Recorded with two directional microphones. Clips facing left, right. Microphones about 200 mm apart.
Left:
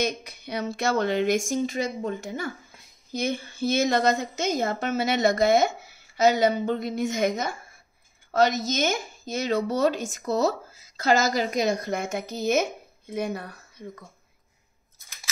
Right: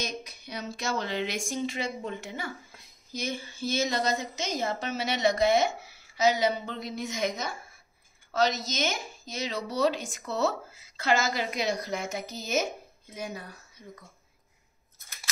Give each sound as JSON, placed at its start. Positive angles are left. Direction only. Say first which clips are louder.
{"t": 0.0, "sound": "speech", "louder": "left 8 dB", "side_deg": 60}
{"t": 3.1, "sound": "speech", "louder": "left 6 dB", "side_deg": 55}